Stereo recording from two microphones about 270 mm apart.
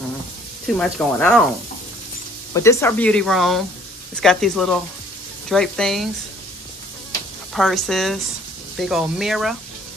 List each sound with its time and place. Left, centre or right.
0.7 s speech: centre
2.5 s speech: centre
7.5 s speech: centre